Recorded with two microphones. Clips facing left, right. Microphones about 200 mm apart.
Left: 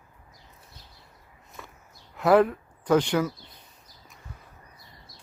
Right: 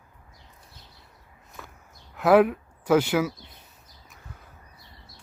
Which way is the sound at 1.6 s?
Centre (ahead or behind).